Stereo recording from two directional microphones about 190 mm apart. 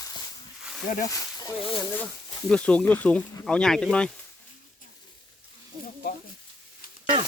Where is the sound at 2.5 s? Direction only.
5° left (ahead or behind).